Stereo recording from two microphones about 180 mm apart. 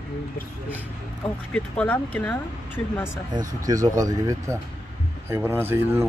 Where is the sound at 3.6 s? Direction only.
20° right (ahead or behind).